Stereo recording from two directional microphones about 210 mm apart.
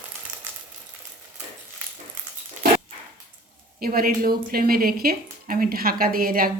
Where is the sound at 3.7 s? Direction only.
45° right (ahead or behind).